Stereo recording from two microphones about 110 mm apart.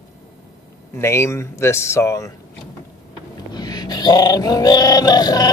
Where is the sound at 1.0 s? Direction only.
25° left (ahead or behind).